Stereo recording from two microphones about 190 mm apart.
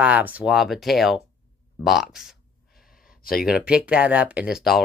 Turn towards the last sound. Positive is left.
turn(degrees=0)  # may be behind; listen again after turning